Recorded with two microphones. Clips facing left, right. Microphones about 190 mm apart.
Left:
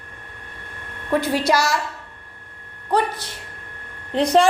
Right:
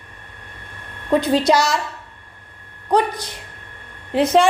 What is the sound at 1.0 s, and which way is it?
Speech, 20° right (ahead or behind).